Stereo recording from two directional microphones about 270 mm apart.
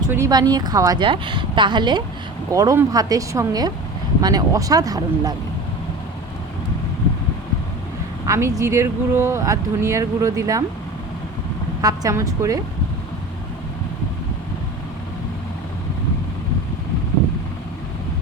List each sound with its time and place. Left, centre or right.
0.0 s speech: centre
8.3 s speech: centre
11.8 s speech: centre